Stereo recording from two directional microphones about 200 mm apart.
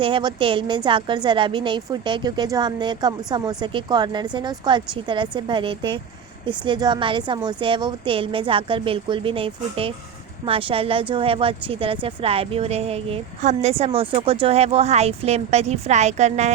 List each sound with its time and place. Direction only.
0.0 s a woman's voice: 25° right (ahead or behind)